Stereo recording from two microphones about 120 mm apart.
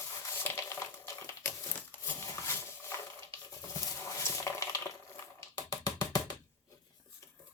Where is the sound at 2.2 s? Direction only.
25° left (ahead or behind).